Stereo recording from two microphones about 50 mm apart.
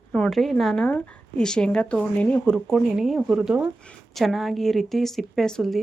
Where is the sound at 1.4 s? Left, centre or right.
Centre.